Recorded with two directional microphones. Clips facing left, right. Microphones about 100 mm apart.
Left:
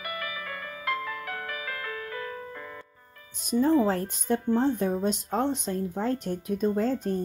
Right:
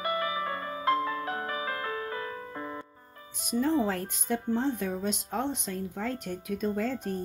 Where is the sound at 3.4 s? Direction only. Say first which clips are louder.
Left 4 dB; 35° left (ahead or behind).